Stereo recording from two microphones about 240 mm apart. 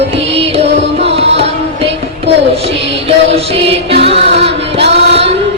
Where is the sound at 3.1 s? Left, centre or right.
Right.